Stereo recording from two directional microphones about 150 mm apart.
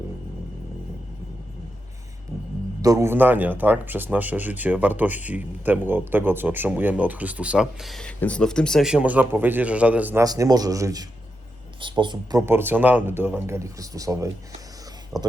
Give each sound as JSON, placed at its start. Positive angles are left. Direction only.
{"t": 2.8, "sound": "speech", "side_deg": -20}
{"t": 10.2, "sound": "speech", "side_deg": -25}
{"t": 11.8, "sound": "speech", "side_deg": -30}
{"t": 12.4, "sound": "speech", "side_deg": -15}
{"t": 15.1, "sound": "speech", "side_deg": 0}